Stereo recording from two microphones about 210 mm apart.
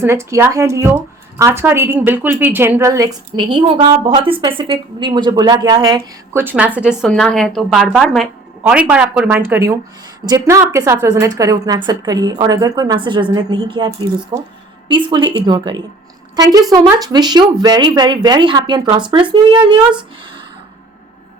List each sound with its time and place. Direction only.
0.0 s a woman's voice: 10° right (ahead or behind)